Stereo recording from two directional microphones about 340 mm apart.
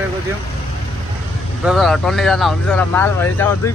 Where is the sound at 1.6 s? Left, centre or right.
Centre.